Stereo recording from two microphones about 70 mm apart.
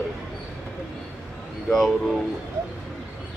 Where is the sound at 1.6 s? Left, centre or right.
Centre.